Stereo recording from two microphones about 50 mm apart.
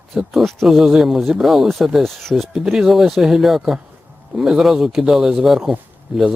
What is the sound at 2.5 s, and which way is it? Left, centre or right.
A man's voice, centre.